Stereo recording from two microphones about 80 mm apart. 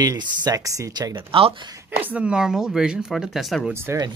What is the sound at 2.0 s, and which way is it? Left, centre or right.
Speech, centre.